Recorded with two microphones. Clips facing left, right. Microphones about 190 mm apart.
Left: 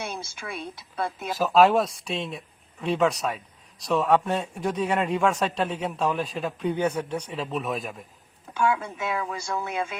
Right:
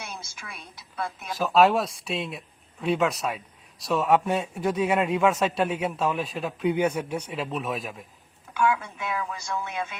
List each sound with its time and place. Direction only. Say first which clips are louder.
0.0 s speech: left 6 dB; 30° left (ahead or behind)
1.4 s speech: left 1 dB; centre (ahead or behind)
8.5 s speech: even; 25° left (ahead or behind)